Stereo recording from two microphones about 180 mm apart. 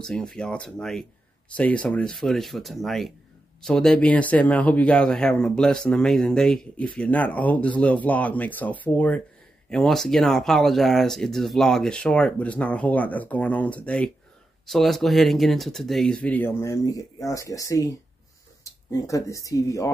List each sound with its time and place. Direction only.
0.0 s speech: 5° left (ahead or behind)